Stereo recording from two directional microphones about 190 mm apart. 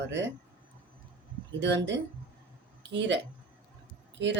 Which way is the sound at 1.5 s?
70° right (ahead or behind).